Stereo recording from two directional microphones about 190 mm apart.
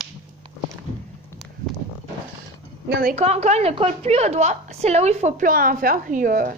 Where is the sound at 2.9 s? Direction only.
55° right (ahead or behind).